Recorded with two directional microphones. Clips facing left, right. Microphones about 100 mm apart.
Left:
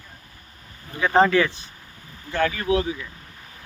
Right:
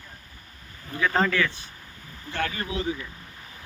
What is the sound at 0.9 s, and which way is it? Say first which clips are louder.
Speech: left 6 dB; 25° left (ahead or behind).